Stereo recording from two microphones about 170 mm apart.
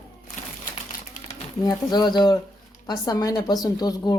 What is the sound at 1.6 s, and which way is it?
Speech, 25° left (ahead or behind).